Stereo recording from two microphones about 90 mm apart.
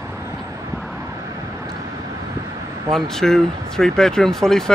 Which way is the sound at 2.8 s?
5° left (ahead or behind).